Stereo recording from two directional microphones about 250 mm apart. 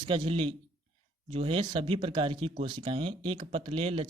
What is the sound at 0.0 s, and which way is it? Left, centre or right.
Speech, right.